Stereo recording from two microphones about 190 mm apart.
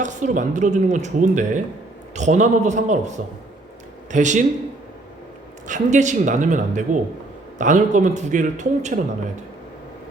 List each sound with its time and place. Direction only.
0.0 s speech: 40° right (ahead or behind)
5.6 s speech: 40° right (ahead or behind)